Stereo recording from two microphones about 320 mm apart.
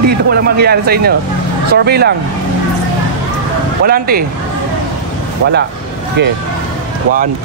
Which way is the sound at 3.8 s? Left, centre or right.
Right.